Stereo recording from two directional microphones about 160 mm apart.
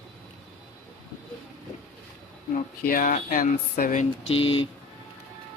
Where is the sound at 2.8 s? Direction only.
65° left (ahead or behind).